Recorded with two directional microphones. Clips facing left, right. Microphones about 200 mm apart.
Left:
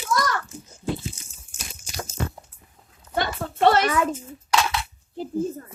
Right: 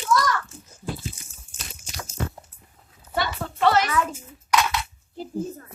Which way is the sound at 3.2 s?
45° left (ahead or behind).